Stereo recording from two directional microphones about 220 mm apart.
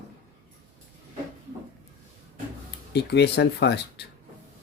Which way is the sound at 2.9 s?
50° left (ahead or behind).